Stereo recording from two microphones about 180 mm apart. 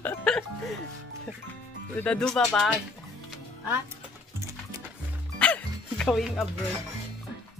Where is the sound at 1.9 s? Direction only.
5° left (ahead or behind).